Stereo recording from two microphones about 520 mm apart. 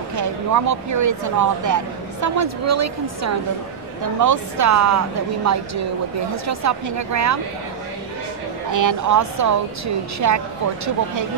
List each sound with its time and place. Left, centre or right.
0.1 s a woman's voice: right
8.7 s a woman's voice: right